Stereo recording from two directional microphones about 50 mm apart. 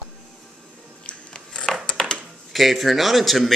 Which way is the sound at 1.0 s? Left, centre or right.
Centre.